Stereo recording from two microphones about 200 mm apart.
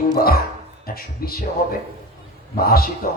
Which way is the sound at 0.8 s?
45° left (ahead or behind).